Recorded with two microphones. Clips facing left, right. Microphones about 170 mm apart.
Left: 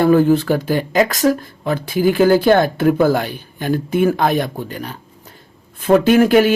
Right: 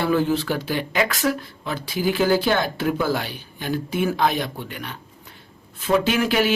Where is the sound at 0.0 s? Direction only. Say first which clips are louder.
Left 8 dB; 50° left (ahead or behind).